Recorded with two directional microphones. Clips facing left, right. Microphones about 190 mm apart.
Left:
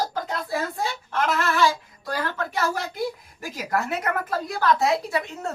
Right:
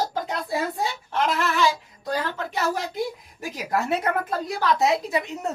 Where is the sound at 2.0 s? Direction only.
20° right (ahead or behind).